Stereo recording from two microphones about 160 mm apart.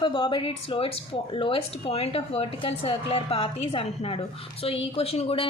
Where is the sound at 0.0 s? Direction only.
30° left (ahead or behind).